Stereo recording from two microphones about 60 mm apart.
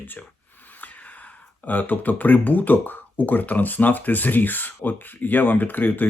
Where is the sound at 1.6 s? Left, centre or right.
Left.